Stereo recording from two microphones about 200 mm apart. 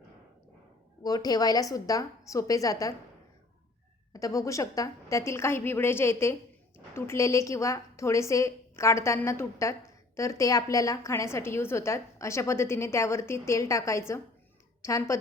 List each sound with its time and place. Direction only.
1.0 s a woman's voice: 20° left (ahead or behind)
4.1 s a woman's voice: 15° left (ahead or behind)